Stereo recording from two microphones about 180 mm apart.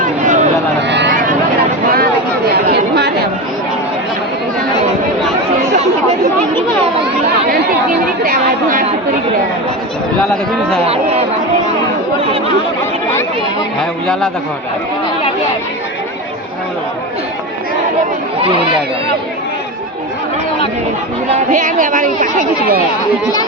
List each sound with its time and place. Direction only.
0.8 s a sound: 75° right (ahead or behind)
1.1 s vehicle: 50° right (ahead or behind)
1.9 s chatter: 60° right (ahead or behind)
5.7 s chatter: 40° right (ahead or behind)
7.0 s chatter: 60° right (ahead or behind)
10.8 s a sound: 35° right (ahead or behind)
18.3 s speech: 30° right (ahead or behind)
21.3 s speech: 45° right (ahead or behind)